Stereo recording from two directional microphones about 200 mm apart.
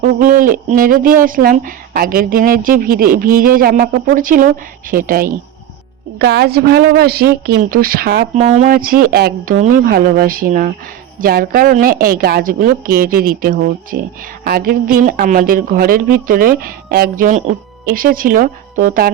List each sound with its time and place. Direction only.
0.0 s a woman's voice: 45° right (ahead or behind)
8.4 s a woman's voice: 35° right (ahead or behind)